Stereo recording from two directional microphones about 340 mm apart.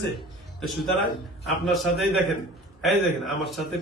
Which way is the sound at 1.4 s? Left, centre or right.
Centre.